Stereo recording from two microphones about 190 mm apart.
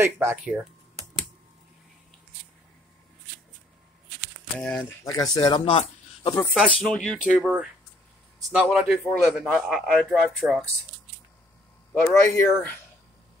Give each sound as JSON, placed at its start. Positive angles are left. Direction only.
{"t": 0.0, "sound": "speech", "side_deg": -15}
{"t": 4.6, "sound": "speech", "side_deg": 5}
{"t": 5.0, "sound": "speech", "side_deg": 20}
{"t": 6.5, "sound": "a man's voice", "side_deg": 5}
{"t": 12.1, "sound": "speech", "side_deg": 15}